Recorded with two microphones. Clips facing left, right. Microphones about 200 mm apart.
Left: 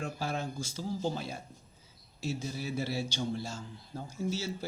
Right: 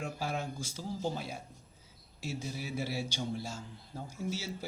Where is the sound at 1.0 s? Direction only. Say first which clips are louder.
Even; 10° right (ahead or behind).